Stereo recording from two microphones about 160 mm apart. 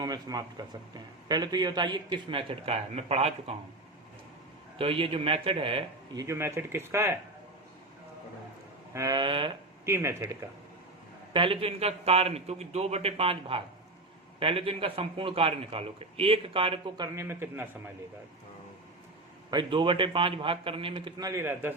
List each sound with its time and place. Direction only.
0.0 s a man's voice: 25° right (ahead or behind); by 3.5 s 40° right (ahead or behind)
4.8 s a man's voice: 35° right (ahead or behind)
6.1 s speech: 15° right (ahead or behind)
8.9 s a man's voice: 20° right (ahead or behind)
9.8 s speech: 15° right (ahead or behind)
11.3 s a man's voice: 35° right (ahead or behind)
17.2 s speech: 15° right (ahead or behind)
19.5 s a man's voice: 30° right (ahead or behind); by 21.8 s 15° right (ahead or behind)